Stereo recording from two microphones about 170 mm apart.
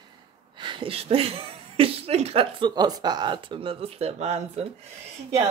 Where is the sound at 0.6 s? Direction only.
30° right (ahead or behind).